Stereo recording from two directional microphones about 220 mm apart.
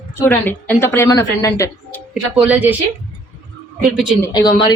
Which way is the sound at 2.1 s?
5° right (ahead or behind).